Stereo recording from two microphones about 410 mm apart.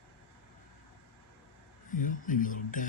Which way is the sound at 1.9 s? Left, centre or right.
Centre.